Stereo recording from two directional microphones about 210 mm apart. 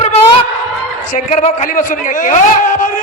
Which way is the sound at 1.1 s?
35° left (ahead or behind).